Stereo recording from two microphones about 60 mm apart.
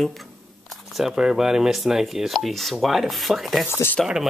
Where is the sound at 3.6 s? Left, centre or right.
Left.